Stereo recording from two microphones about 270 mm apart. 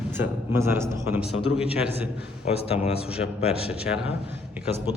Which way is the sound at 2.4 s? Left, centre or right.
Left.